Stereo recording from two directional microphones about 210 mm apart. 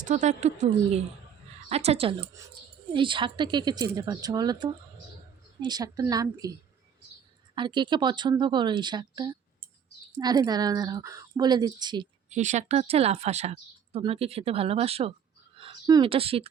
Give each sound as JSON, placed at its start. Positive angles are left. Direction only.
{"t": 0.0, "sound": "a woman's voice", "side_deg": -35}
{"t": 7.5, "sound": "speech", "side_deg": -20}
{"t": 12.3, "sound": "speech", "side_deg": -35}